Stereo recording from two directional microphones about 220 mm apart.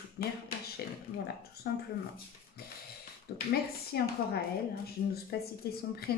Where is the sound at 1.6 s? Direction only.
45° left (ahead or behind).